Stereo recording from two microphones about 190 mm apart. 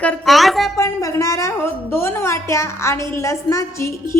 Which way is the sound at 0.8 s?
15° left (ahead or behind).